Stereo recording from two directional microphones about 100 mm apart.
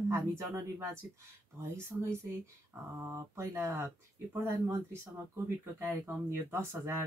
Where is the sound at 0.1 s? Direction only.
25° right (ahead or behind).